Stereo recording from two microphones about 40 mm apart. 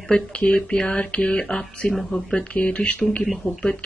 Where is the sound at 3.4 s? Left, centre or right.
Left.